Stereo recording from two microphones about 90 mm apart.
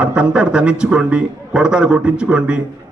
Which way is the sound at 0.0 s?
10° right (ahead or behind).